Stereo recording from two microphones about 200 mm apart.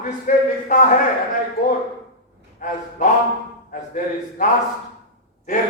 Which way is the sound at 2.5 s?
40° left (ahead or behind).